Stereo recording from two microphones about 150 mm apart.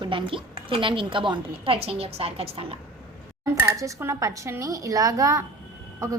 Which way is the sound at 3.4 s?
20° right (ahead or behind).